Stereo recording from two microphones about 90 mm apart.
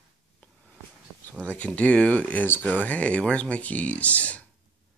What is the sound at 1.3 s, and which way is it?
Speech, 15° left (ahead or behind).